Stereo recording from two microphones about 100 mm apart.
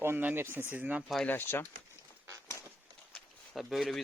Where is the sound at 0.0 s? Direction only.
20° right (ahead or behind).